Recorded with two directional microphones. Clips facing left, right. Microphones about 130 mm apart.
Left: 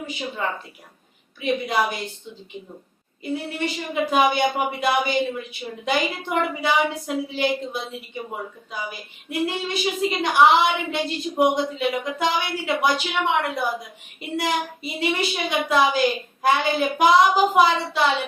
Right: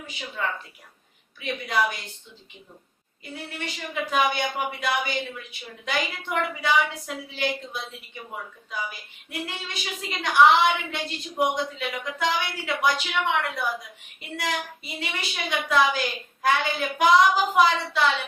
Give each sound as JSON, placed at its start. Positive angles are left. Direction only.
{"t": 0.2, "sound": "speech", "side_deg": 25}
{"t": 3.2, "sound": "speech", "side_deg": 20}